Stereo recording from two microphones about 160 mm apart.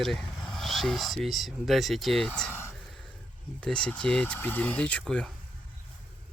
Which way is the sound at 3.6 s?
5° left (ahead or behind).